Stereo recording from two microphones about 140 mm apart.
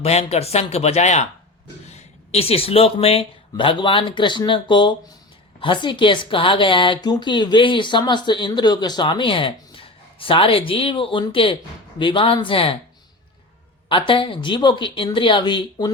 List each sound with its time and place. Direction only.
0.0 s a woman's voice: 50° left (ahead or behind)
13.8 s a woman's voice: 35° left (ahead or behind)